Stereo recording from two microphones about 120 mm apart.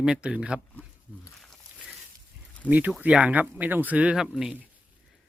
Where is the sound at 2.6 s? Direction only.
15° right (ahead or behind).